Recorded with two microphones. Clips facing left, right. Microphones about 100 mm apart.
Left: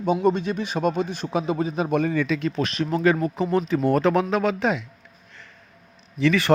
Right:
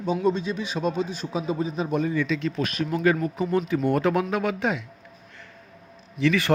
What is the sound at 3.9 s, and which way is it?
Speech, 90° left.